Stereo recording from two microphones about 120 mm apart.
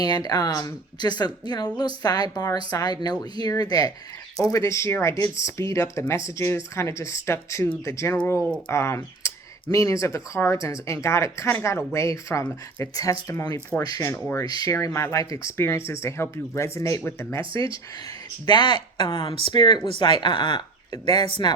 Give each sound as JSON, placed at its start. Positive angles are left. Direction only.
{"t": 0.0, "sound": "a woman's voice", "side_deg": 35}
{"t": 8.4, "sound": "speech", "side_deg": 10}
{"t": 8.7, "sound": "speech", "side_deg": 20}
{"t": 18.4, "sound": "a woman's voice", "side_deg": 35}